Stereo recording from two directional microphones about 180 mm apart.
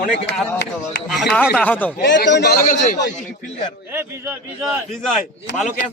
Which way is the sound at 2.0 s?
75° left (ahead or behind).